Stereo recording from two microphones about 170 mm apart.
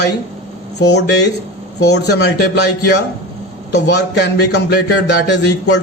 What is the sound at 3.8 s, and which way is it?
A man's voice, 85° left.